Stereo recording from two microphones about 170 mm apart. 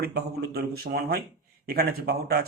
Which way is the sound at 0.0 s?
70° right (ahead or behind).